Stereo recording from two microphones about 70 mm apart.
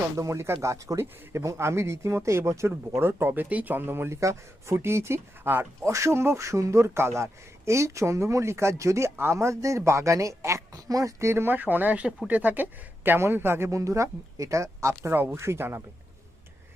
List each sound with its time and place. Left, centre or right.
0.2 s speech: right
4.2 s speech: right
5.9 s a man's voice: right
11.5 s a man's voice: right
15.1 s speech: right